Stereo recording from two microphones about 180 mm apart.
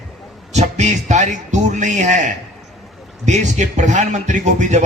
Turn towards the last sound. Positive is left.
turn(degrees=-40)  # may be behind; listen again after turning